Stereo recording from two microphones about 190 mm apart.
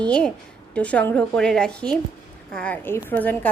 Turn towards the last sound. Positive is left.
turn(degrees=10)  # may be behind; listen again after turning